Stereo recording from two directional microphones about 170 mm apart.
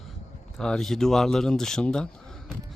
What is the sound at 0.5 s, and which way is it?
Speech, 5° left (ahead or behind).